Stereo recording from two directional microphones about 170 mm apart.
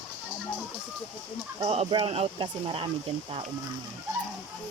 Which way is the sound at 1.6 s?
35° right (ahead or behind).